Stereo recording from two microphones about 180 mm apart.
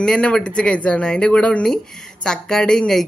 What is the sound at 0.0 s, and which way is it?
A woman's voice, 5° left (ahead or behind).